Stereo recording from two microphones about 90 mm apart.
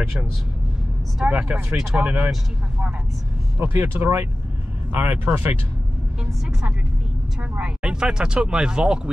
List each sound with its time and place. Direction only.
1.2 s speech: 15° right (ahead or behind)
3.5 s speech: 25° right (ahead or behind)
7.5 s speech: 10° right (ahead or behind)